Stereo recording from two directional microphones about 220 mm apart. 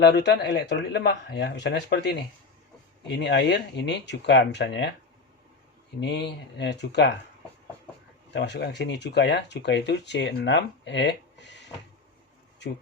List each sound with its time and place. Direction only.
0.0 s speech: 50° left (ahead or behind)
6.0 s speech: 50° left (ahead or behind)
8.3 s speech: 50° left (ahead or behind)